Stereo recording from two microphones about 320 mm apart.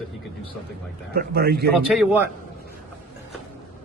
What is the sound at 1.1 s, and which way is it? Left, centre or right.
Speech, right.